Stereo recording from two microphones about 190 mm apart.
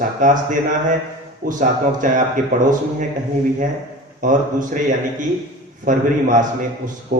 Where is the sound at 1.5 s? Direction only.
45° right (ahead or behind).